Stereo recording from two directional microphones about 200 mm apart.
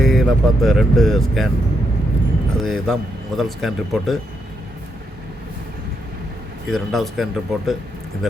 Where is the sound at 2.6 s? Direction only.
Centre (ahead or behind).